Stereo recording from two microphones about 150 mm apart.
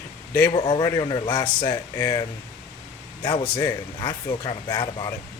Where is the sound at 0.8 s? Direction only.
25° left (ahead or behind).